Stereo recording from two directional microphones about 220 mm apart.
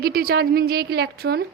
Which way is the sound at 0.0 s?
45° right (ahead or behind).